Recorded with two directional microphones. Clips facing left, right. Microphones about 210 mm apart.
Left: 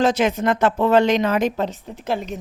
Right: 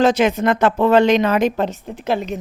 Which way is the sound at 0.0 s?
65° right (ahead or behind).